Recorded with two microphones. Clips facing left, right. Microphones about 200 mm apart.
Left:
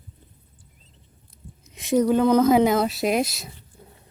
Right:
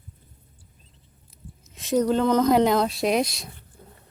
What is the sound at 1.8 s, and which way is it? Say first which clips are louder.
A woman's voice: left 2 dB; 10° left (ahead or behind).